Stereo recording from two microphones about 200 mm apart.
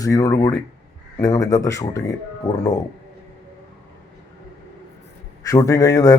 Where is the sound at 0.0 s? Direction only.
15° left (ahead or behind).